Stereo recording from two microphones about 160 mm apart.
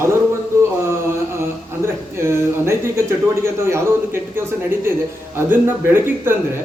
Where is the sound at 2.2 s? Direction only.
15° right (ahead or behind).